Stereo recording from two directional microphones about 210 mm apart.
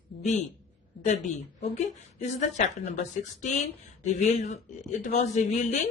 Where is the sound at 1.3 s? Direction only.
35° left (ahead or behind).